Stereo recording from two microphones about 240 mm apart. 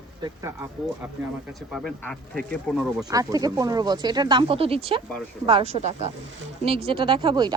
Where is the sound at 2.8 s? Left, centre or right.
Centre.